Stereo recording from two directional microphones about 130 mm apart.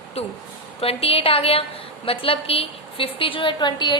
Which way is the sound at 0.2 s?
50° left (ahead or behind).